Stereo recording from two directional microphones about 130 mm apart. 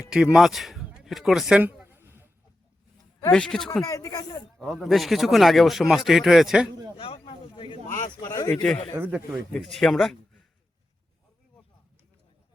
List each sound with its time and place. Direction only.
0.0 s a man's voice: 5° right (ahead or behind)
3.3 s a man's voice: 5° left (ahead or behind)
3.8 s speech: 25° left (ahead or behind)
4.5 s a man's voice: centre (ahead or behind)
6.9 s a sound: 45° left (ahead or behind)
8.2 s speech: 30° left (ahead or behind)
9.0 s a man's voice: 10° right (ahead or behind)
9.5 s a man's voice: 5° left (ahead or behind)